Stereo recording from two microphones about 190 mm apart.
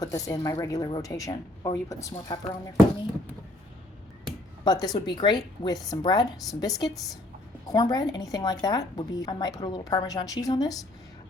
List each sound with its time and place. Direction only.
0.0 s a woman's voice: 15° left (ahead or behind)
4.6 s a woman's voice: 20° left (ahead or behind)